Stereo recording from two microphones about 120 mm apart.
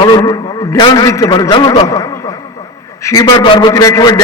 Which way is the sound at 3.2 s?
35° left (ahead or behind).